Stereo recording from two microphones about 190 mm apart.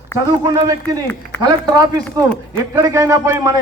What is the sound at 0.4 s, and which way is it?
A man's voice, 20° right (ahead or behind).